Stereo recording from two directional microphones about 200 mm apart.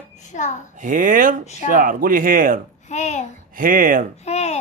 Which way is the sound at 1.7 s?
45° right (ahead or behind).